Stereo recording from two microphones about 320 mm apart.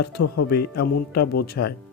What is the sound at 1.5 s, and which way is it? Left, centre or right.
Speech, left.